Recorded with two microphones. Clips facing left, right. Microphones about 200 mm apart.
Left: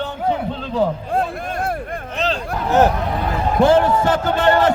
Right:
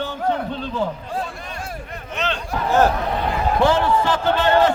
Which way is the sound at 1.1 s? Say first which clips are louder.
Left 7 dB; 60° left (ahead or behind).